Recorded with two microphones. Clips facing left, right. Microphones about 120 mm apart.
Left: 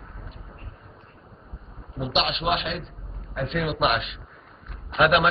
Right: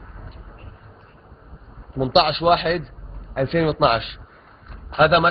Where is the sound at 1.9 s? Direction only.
60° right (ahead or behind).